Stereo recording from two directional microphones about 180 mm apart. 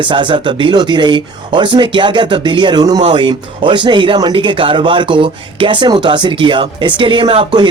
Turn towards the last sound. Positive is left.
turn(degrees=-30)  # may be behind; listen again after turning